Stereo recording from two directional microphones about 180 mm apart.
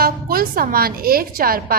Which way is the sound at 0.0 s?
55° right (ahead or behind).